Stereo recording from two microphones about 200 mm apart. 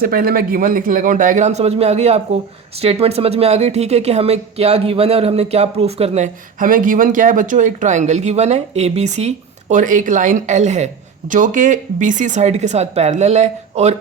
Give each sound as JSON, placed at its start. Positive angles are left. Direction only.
{"t": 0.0, "sound": "speech", "side_deg": -50}